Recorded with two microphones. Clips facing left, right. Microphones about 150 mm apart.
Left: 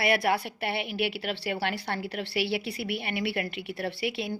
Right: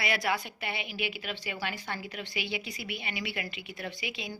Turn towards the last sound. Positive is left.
turn(degrees=60)  # may be behind; listen again after turning